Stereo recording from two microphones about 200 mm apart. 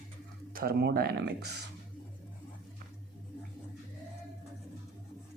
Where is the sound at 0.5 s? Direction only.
50° right (ahead or behind).